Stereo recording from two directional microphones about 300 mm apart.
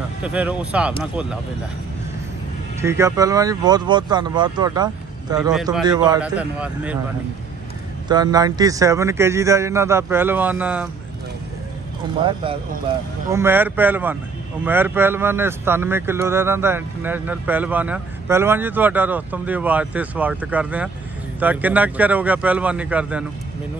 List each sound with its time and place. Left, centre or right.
0.2 s speech: centre
2.8 s a man's voice: centre
5.5 s speech: centre
8.1 s a man's voice: centre
12.2 s a man's voice: centre